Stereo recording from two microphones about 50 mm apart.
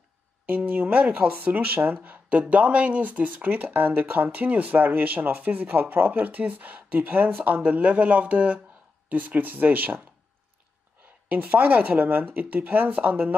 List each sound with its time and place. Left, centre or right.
0.7 s speech: right
11.2 s speech: right